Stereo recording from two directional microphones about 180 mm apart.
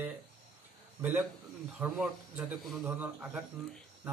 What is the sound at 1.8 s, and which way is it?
Speech, 10° right (ahead or behind).